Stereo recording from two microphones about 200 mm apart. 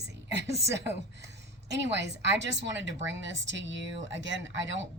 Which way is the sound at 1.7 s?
60° right (ahead or behind).